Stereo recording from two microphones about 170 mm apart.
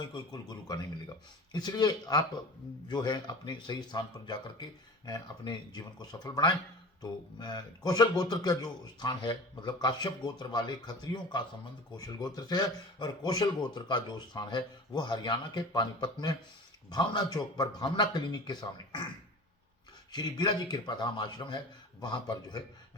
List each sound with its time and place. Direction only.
0.0 s a man's voice: 25° left (ahead or behind)
20.1 s a man's voice: 25° left (ahead or behind)